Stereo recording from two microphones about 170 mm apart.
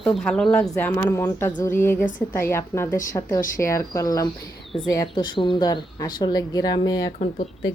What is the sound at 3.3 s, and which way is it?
Speech, 55° left (ahead or behind).